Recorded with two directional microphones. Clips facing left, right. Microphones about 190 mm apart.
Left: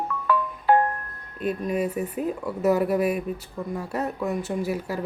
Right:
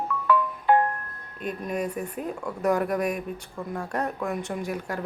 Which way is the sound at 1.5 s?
5° left (ahead or behind).